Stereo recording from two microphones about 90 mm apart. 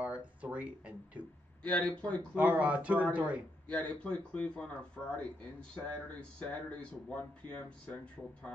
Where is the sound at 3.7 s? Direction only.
15° left (ahead or behind).